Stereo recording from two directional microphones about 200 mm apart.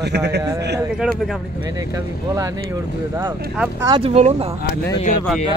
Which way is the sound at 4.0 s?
30° right (ahead or behind).